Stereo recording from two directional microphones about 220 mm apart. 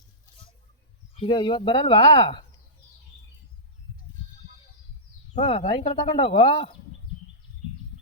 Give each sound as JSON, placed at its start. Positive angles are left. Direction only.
{"t": 1.1, "sound": "speech", "side_deg": 25}
{"t": 5.3, "sound": "speech", "side_deg": 25}